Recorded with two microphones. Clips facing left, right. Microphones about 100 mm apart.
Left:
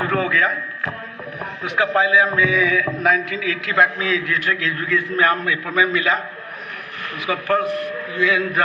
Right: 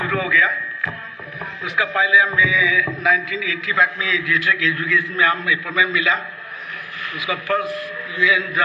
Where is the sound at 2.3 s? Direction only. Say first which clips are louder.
Left 1 dB; 60° left (ahead or behind).